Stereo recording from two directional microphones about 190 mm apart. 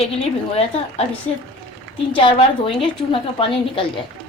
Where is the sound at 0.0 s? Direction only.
30° left (ahead or behind).